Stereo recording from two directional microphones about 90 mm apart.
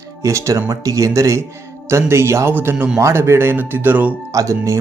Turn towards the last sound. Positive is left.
turn(degrees=-35)  # may be behind; listen again after turning